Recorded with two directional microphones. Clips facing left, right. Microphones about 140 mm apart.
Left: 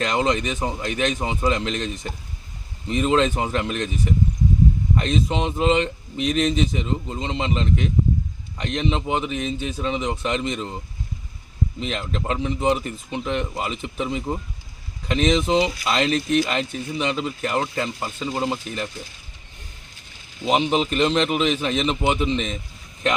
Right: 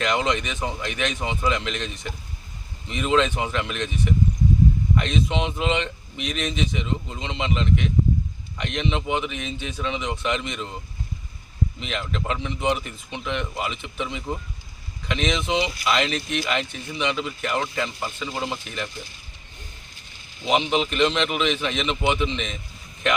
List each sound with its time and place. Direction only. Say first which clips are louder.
0.0 s speech: left 2 dB; 35° left (ahead or behind)
11.8 s speech: left 2 dB; 35° left (ahead or behind)
20.4 s speech: left 2 dB; 35° left (ahead or behind)